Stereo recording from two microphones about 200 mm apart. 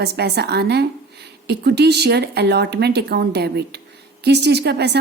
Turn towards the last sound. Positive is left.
turn(degrees=-55)  # may be behind; listen again after turning